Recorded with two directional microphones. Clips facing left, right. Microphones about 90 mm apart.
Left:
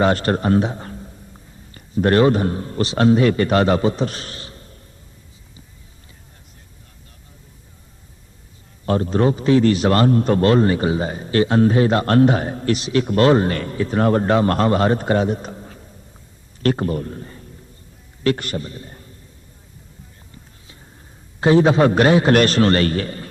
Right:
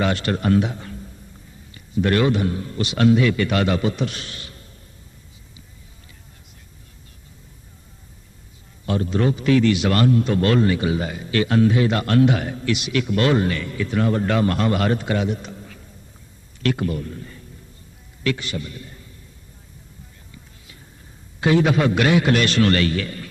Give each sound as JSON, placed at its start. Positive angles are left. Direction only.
{"t": 0.0, "sound": "a man's voice", "side_deg": 40}
{"t": 8.9, "sound": "a man's voice", "side_deg": 40}
{"t": 18.5, "sound": "a man's voice", "side_deg": 35}
{"t": 21.4, "sound": "a man's voice", "side_deg": 35}